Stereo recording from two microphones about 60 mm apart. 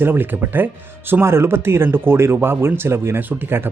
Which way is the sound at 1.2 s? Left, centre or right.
Right.